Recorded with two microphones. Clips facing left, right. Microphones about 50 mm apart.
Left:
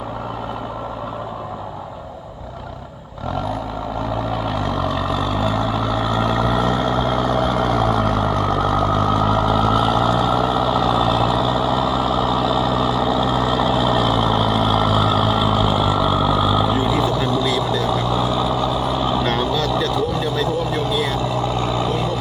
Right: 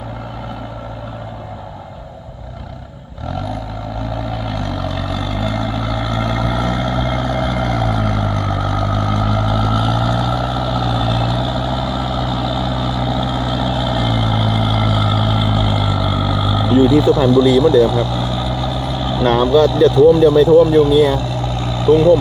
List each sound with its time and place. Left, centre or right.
4.4 s vehicle: centre
19.2 s vehicle: centre
19.9 s speech: centre
21.2 s vehicle: centre